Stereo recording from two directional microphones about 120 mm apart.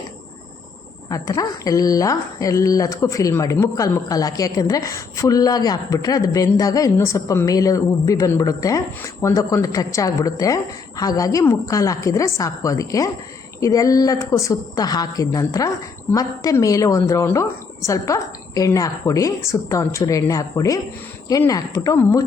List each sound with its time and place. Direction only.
1.1 s speech: 30° left (ahead or behind)